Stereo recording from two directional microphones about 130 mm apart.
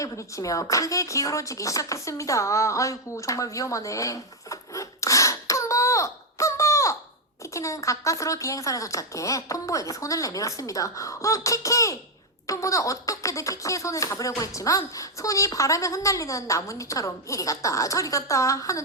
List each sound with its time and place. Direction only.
0.0 s a woman's voice: 25° left (ahead or behind)